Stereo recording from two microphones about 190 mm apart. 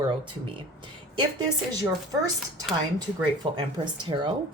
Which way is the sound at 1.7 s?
20° right (ahead or behind).